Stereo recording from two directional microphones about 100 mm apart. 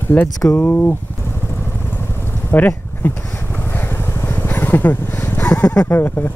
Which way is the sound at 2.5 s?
20° left (ahead or behind).